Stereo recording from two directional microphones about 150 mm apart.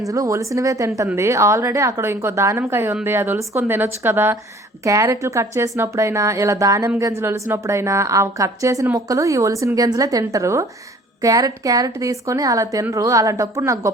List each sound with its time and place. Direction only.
0.1 s a woman's voice: 20° right (ahead or behind)